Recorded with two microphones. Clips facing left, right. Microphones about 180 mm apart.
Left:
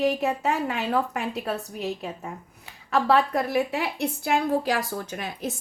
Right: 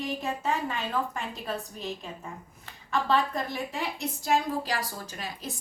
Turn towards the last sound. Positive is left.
turn(degrees=60)  # may be behind; listen again after turning